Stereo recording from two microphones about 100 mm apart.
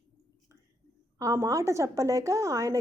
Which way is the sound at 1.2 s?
30° right (ahead or behind).